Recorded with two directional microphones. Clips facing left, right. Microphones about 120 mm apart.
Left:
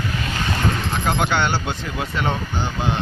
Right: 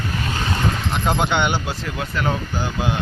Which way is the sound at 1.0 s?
20° right (ahead or behind).